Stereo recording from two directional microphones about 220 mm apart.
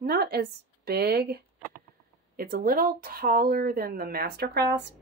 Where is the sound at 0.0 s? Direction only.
45° right (ahead or behind).